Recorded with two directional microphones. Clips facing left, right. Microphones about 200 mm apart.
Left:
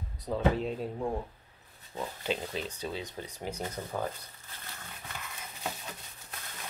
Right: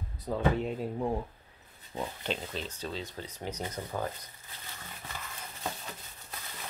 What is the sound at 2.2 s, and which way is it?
Speech, 10° left (ahead or behind).